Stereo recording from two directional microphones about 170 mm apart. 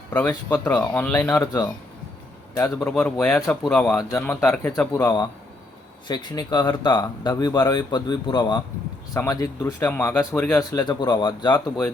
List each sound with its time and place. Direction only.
0.1 s speech: 10° left (ahead or behind)
4.4 s speech: 5° left (ahead or behind)
6.1 s speech: 25° left (ahead or behind); by 10.6 s 5° left (ahead or behind)
10.6 s speech: 20° left (ahead or behind)